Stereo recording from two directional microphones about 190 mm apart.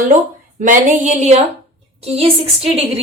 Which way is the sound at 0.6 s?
45° right (ahead or behind).